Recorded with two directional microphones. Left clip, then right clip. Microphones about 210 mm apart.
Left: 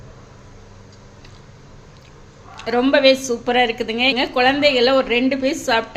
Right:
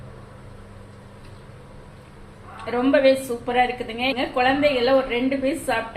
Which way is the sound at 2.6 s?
50° left (ahead or behind).